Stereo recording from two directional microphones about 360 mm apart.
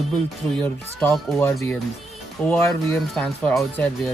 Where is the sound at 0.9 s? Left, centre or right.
Centre.